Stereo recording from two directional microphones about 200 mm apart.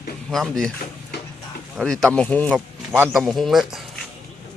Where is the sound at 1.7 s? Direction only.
5° left (ahead or behind).